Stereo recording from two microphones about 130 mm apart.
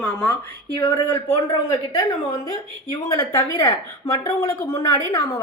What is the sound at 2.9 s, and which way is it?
Speech, 25° left (ahead or behind).